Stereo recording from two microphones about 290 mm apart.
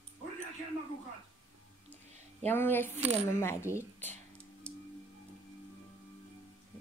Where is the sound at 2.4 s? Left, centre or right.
Centre.